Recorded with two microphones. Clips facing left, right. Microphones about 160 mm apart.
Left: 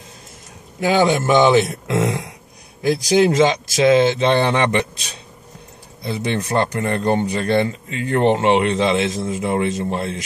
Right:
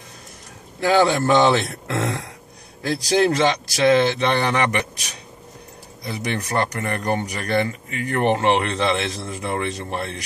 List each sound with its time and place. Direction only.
0.7 s speech: 20° left (ahead or behind)